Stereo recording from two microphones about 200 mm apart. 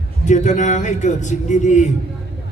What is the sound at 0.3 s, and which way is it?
A man's voice, 35° left (ahead or behind).